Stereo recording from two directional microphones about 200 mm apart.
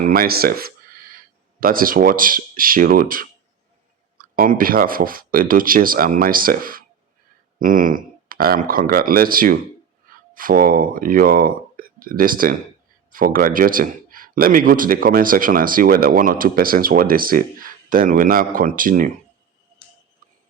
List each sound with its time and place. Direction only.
0.0 s speech: 45° right (ahead or behind)